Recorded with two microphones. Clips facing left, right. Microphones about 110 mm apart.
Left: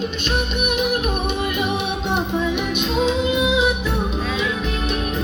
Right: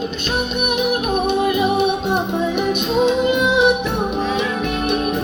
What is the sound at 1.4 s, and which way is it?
Music, 40° right (ahead or behind).